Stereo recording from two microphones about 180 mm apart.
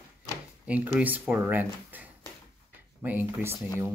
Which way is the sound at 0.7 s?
10° right (ahead or behind).